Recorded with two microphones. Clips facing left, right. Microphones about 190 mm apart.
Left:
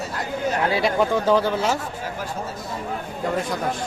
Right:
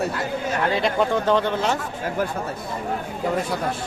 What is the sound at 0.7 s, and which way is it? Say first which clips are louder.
Speech: even; 5° left (ahead or behind).